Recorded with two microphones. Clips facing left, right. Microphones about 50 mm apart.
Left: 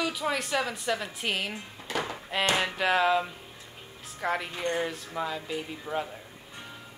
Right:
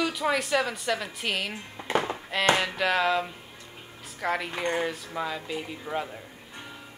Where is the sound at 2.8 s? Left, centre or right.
Centre.